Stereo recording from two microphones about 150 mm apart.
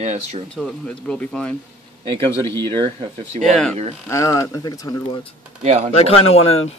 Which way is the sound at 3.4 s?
5° left (ahead or behind).